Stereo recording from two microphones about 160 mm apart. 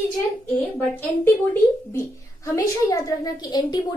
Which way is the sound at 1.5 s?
15° left (ahead or behind).